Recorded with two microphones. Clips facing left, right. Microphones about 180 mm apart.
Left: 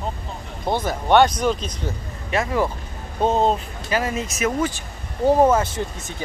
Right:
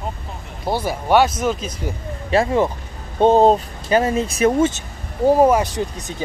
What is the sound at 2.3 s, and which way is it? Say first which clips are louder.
Speech: right 5 dB; 30° right (ahead or behind).